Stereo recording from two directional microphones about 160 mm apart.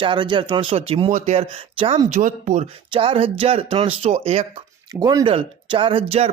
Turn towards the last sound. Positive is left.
turn(degrees=-40)  # may be behind; listen again after turning